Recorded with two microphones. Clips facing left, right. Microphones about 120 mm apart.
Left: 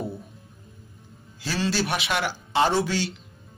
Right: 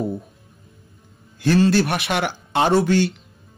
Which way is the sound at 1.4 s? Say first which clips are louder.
Right 10 dB; 55° right (ahead or behind).